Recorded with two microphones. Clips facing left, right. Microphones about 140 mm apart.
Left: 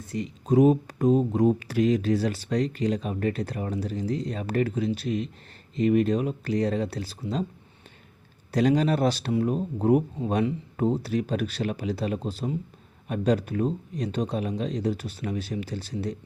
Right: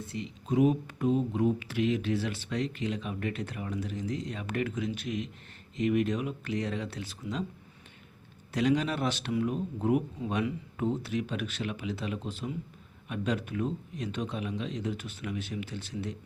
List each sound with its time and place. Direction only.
0.0 s speech: 40° left (ahead or behind)
8.5 s speech: 40° left (ahead or behind)